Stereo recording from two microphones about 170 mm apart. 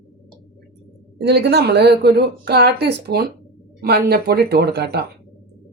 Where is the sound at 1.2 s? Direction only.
80° right.